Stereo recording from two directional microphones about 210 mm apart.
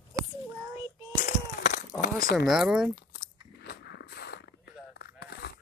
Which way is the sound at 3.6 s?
55° left (ahead or behind).